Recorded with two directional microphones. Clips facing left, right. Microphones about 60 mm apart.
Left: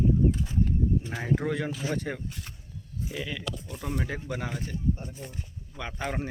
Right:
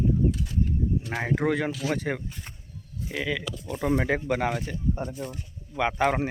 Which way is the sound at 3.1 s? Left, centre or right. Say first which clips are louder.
Right 6 dB; right.